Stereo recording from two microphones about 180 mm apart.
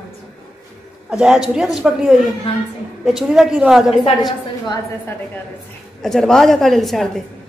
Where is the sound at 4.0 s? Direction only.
30° left (ahead or behind).